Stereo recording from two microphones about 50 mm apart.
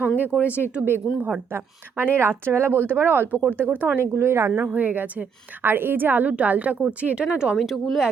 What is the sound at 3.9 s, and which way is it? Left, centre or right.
Speech, right.